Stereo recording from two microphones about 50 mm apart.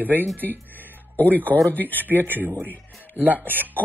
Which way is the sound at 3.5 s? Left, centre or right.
Right.